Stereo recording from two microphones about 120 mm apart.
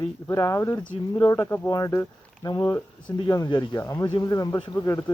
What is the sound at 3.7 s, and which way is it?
Speech, 25° left (ahead or behind).